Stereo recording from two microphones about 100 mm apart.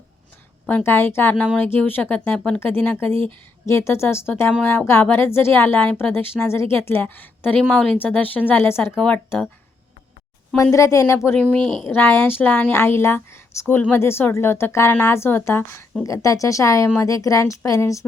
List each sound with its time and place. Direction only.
0.9 s a woman's voice: 25° left (ahead or behind)
9.0 s speech: 10° left (ahead or behind)
10.6 s a woman's voice: 30° left (ahead or behind)